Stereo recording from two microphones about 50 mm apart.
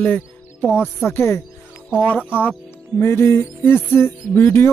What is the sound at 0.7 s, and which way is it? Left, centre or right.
Speech, left.